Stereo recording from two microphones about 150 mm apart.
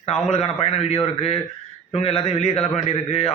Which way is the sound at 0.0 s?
45° left (ahead or behind).